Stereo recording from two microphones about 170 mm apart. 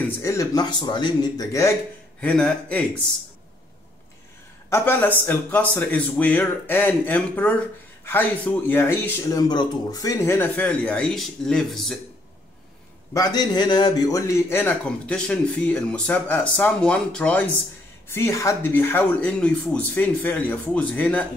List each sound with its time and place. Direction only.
0.2 s speech: 20° left (ahead or behind)
2.1 s a man's voice: 5° left (ahead or behind)
4.6 s a man's voice: 15° left (ahead or behind)
13.1 s a man's voice: 25° left (ahead or behind)